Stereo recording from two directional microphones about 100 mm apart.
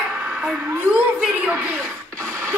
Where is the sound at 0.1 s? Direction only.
15° right (ahead or behind).